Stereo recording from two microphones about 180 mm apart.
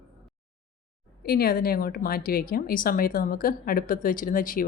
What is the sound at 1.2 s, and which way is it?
Speech, 55° left (ahead or behind).